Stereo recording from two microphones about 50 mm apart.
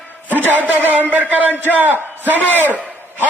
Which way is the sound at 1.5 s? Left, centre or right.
Left.